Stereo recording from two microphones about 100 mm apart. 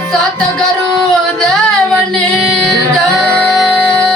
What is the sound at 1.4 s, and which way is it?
Female singing, 10° left (ahead or behind).